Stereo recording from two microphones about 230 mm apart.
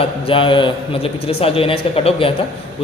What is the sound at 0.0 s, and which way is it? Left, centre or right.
A man's voice, left.